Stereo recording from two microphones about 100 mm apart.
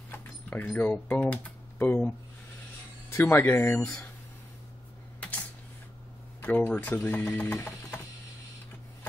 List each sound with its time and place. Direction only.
0.1 s keys jangling: 20° left (ahead or behind)
0.7 s speech: 15° left (ahead or behind)
6.4 s speech: 20° left (ahead or behind)
7.5 s music: 25° left (ahead or behind)